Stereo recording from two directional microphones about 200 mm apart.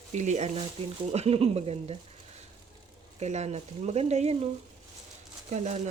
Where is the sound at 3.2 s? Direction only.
35° right (ahead or behind).